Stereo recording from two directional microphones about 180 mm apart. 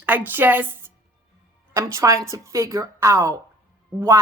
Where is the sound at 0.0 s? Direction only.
10° right (ahead or behind).